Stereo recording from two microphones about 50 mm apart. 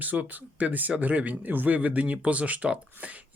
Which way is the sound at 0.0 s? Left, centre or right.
Right.